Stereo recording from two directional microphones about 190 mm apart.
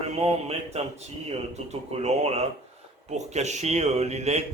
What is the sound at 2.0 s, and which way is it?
Speech, 35° right (ahead or behind).